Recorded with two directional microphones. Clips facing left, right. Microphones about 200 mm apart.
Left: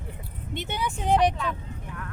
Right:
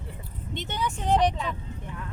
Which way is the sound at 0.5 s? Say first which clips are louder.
Even; 10° left (ahead or behind).